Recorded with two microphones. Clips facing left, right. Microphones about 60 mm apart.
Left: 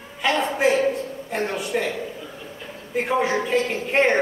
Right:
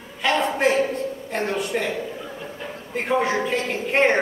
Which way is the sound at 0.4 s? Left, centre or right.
Centre.